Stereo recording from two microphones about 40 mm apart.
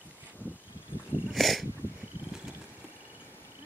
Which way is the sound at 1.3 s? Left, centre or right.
Centre.